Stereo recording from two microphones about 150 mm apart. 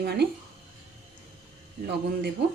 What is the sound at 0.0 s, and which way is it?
Speech, 90° right.